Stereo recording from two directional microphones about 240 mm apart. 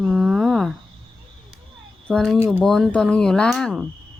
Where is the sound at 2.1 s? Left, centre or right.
Centre.